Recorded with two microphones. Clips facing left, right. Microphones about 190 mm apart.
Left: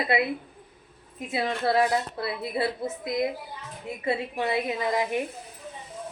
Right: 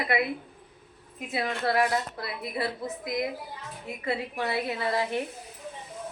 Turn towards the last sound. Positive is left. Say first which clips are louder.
# left 2 dB
turn(degrees=15)  # may be behind; listen again after turning